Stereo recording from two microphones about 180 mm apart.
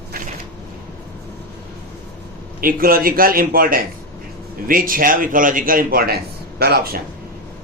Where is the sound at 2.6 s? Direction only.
50° right (ahead or behind).